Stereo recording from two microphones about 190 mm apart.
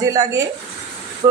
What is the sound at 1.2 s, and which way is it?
Vehicle, 20° right (ahead or behind).